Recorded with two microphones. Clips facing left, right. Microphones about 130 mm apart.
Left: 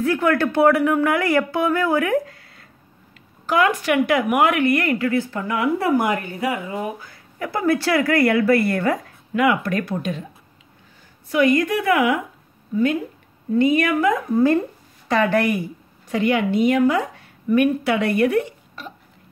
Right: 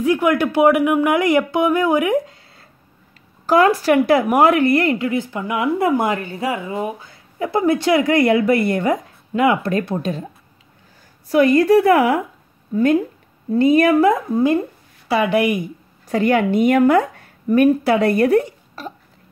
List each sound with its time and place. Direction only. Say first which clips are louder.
0.0 s speech: right 2 dB; 15° right (ahead or behind); by 10.2 s 30° right (ahead or behind)
11.2 s a woman's voice: right 5 dB; 35° right (ahead or behind)
14.3 s speech: even; 15° right (ahead or behind)
16.1 s a woman's voice: right 3 dB; 45° right (ahead or behind)